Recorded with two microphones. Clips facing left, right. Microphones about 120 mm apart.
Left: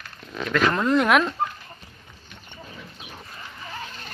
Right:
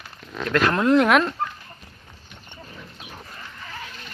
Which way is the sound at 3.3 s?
15° left (ahead or behind).